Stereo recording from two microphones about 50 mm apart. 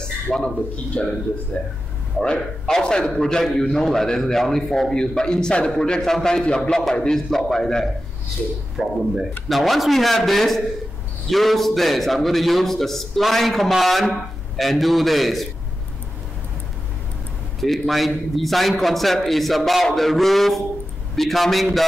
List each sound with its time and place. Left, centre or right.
0.3 s a man's voice: centre
1.0 s a man's voice: left; by 7.9 s centre
8.8 s speech: centre
9.5 s a man's voice: centre
17.6 s a man's voice: centre